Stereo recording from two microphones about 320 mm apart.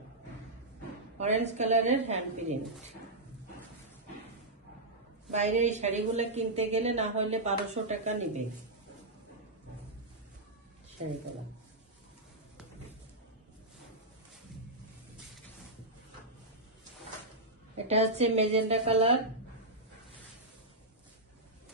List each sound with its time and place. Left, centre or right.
1.2 s a woman's voice: right
5.3 s a woman's voice: right
17.8 s a woman's voice: centre